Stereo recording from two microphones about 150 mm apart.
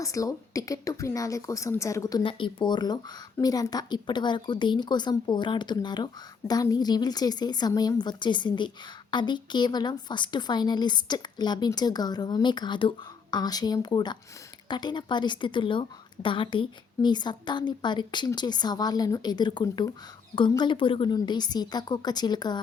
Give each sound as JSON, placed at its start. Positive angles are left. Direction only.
{"t": 0.0, "sound": "speech", "side_deg": 20}
{"t": 2.2, "sound": "speech", "side_deg": 35}